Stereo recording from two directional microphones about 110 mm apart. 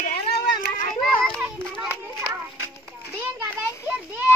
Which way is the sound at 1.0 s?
Centre (ahead or behind).